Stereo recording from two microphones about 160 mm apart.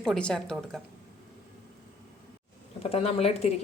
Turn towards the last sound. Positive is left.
turn(degrees=40)  # may be behind; listen again after turning